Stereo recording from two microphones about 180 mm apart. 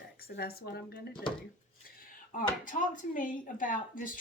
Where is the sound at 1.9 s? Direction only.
50° left (ahead or behind).